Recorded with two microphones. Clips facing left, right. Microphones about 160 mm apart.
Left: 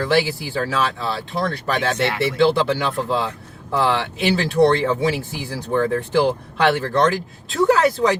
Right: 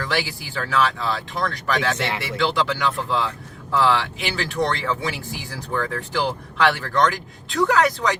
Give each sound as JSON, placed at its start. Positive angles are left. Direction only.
{"t": 0.0, "sound": "speech", "side_deg": 30}